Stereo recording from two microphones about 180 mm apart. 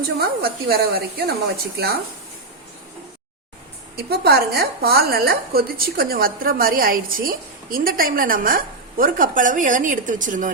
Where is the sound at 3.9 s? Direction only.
60° right (ahead or behind).